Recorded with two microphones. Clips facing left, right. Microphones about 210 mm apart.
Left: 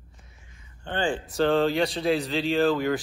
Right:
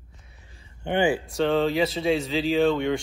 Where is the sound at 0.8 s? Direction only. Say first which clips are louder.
Right 5 dB; 10° right (ahead or behind).